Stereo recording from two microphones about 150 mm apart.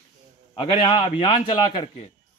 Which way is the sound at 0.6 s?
35° left (ahead or behind).